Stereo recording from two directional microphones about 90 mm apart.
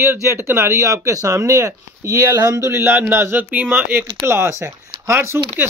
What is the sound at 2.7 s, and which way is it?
Speech, 25° right (ahead or behind).